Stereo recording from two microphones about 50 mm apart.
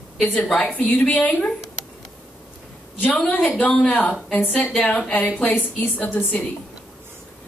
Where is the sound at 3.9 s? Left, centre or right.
Left.